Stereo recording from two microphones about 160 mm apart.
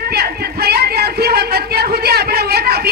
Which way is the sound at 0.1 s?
75° right (ahead or behind).